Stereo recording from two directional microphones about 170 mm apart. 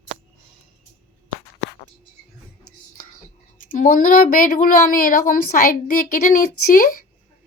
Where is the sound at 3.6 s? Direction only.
55° left (ahead or behind).